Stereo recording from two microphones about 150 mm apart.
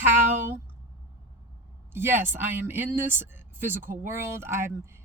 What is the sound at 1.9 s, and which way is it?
Speech, 15° right (ahead or behind).